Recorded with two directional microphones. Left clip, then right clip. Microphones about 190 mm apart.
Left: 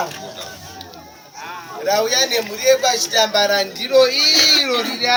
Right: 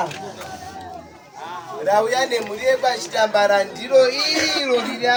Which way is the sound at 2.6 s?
15° right (ahead or behind).